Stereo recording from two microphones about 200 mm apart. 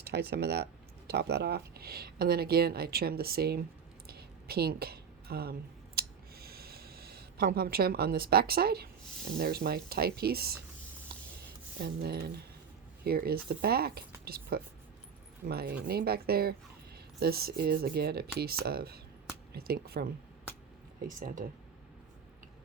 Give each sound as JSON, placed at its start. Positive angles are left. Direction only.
{"t": 0.0, "sound": "speech", "side_deg": -50}
{"t": 4.0, "sound": "a sound", "side_deg": -50}
{"t": 9.4, "sound": "speech", "side_deg": -50}
{"t": 11.8, "sound": "speech", "side_deg": -50}
{"t": 21.1, "sound": "speech", "side_deg": -40}